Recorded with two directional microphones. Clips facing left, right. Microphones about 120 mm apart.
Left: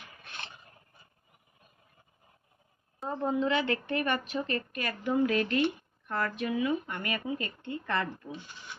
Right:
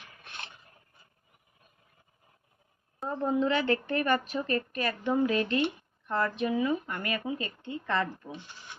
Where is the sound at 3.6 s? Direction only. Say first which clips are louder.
Right 2 dB; 40° right (ahead or behind).